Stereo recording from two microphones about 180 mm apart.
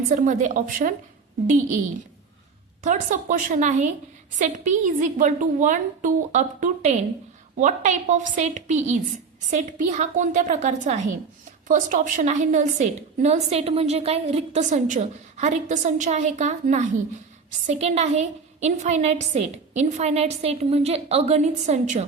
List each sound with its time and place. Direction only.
0.1 s a woman's voice: 45° right (ahead or behind)
2.8 s a woman's voice: 45° right (ahead or behind)